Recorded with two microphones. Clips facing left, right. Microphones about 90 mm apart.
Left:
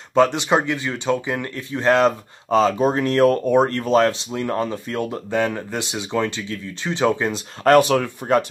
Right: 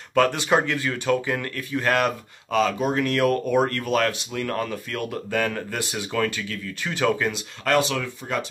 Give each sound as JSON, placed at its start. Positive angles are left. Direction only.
{"t": 0.1, "sound": "speech", "side_deg": 20}
{"t": 7.6, "sound": "speech", "side_deg": 40}